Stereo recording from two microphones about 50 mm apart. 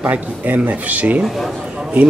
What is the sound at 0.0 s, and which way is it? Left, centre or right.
A man's voice, right.